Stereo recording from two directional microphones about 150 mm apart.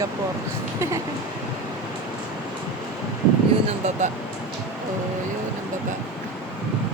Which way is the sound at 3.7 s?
50° right (ahead or behind).